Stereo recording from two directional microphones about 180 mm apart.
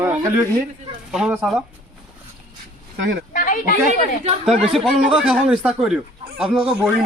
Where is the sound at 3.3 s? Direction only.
50° left (ahead or behind).